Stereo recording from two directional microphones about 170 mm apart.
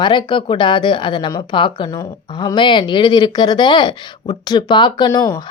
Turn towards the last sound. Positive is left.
turn(degrees=20)  # may be behind; listen again after turning